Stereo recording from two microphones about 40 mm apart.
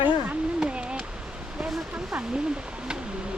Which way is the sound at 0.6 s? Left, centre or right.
Right.